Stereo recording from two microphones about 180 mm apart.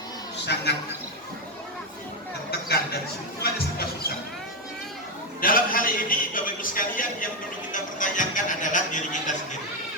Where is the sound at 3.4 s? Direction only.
60° left (ahead or behind).